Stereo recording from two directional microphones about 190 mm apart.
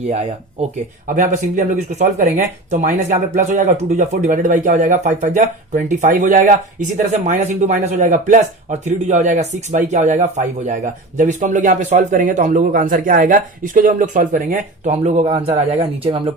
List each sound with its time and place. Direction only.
0.1 s speech: 35° right (ahead or behind)